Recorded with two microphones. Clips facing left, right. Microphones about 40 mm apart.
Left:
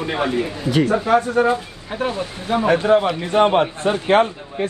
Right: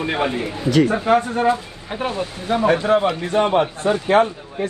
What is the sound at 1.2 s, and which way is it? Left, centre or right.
Speech, right.